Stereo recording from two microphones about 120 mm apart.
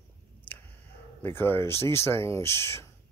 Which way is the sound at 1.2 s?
20° left (ahead or behind).